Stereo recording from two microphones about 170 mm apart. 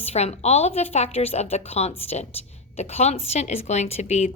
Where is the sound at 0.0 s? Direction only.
40° left (ahead or behind).